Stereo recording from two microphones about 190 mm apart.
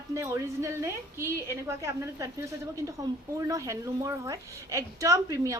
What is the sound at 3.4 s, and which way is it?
A woman's voice, 15° right (ahead or behind).